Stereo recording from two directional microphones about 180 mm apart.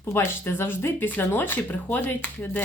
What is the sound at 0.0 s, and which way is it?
Speech, 15° left (ahead or behind).